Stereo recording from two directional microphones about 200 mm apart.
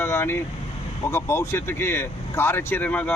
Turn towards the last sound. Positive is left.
turn(degrees=5)  # may be behind; listen again after turning